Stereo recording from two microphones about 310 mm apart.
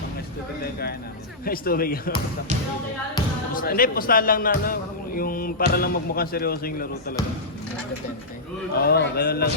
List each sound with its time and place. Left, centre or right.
0.6 s a man's voice: left
3.5 s a man's voice: left
8.8 s a man's voice: left